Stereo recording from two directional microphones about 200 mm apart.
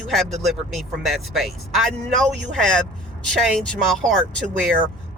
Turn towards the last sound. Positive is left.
turn(degrees=5)  # may be behind; listen again after turning